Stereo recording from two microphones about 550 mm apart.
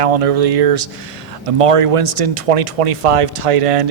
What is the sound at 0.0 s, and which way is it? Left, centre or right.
Speech, right.